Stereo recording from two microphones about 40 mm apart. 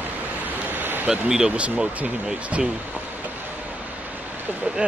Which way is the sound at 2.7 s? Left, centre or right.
Right.